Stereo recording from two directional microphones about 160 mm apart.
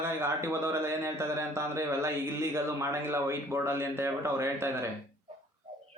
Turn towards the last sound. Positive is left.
turn(degrees=-15)  # may be behind; listen again after turning